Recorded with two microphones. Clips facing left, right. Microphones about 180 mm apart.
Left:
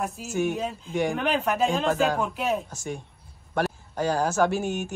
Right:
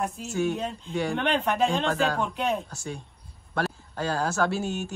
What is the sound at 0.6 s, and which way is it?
Speech, 5° left (ahead or behind).